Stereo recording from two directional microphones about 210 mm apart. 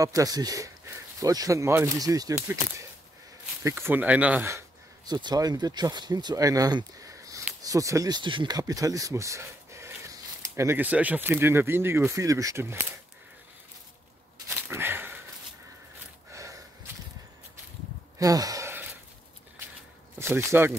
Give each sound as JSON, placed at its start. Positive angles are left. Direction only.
{"t": 0.0, "sound": "speech", "side_deg": -15}
{"t": 3.6, "sound": "speech", "side_deg": -10}
{"t": 14.7, "sound": "a sound", "side_deg": -10}
{"t": 16.3, "sound": "snort", "side_deg": -15}
{"t": 18.2, "sound": "sigh", "side_deg": -15}
{"t": 20.2, "sound": "speech", "side_deg": -10}